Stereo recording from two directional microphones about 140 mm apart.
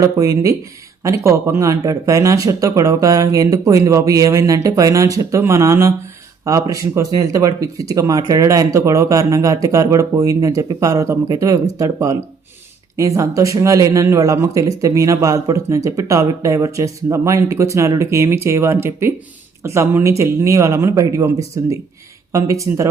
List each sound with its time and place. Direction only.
0.0 s speech: 25° right (ahead or behind)